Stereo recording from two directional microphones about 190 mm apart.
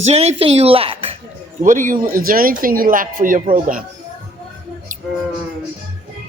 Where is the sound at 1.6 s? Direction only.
45° right (ahead or behind).